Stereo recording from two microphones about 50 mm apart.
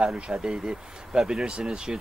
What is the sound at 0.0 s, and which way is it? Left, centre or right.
Speech, centre.